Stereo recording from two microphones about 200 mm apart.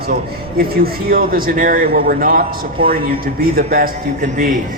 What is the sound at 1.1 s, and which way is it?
A man's voice, 45° right (ahead or behind).